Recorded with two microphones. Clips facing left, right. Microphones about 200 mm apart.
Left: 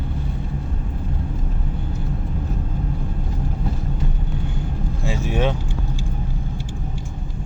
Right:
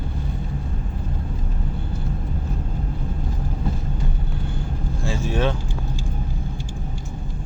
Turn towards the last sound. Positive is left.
turn(degrees=15)  # may be behind; listen again after turning